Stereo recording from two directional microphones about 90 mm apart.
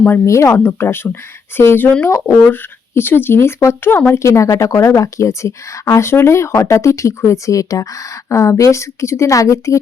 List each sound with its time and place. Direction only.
0.3 s speech: 35° left (ahead or behind)
0.5 s speech: 20° left (ahead or behind)
4.2 s speech: 35° left (ahead or behind)